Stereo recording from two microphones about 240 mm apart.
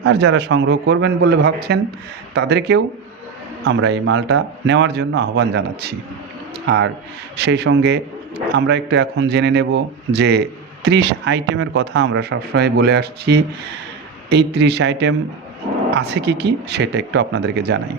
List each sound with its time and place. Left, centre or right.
0.0 s speech: right